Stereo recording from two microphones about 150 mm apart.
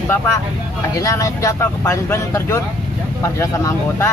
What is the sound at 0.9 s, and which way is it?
Speech, 20° left (ahead or behind).